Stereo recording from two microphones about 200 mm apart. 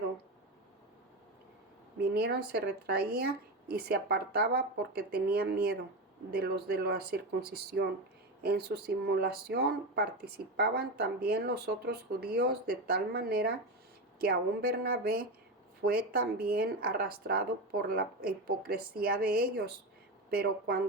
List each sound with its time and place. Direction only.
2.0 s speech: 55° right (ahead or behind)